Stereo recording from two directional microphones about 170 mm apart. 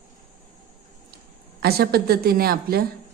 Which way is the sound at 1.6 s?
65° right (ahead or behind).